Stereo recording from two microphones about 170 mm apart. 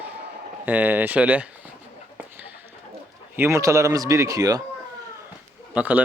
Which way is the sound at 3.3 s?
15° right (ahead or behind).